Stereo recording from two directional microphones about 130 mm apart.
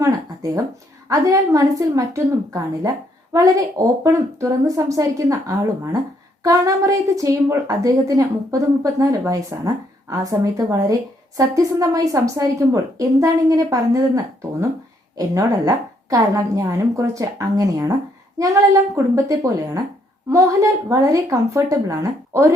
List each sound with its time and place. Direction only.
1.0 s a woman's voice: 25° right (ahead or behind)
15.2 s a woman's voice: 25° right (ahead or behind)